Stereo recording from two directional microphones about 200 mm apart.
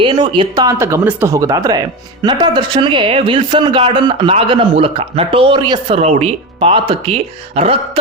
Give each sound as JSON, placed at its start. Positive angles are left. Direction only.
{"t": 0.0, "sound": "speech", "side_deg": -25}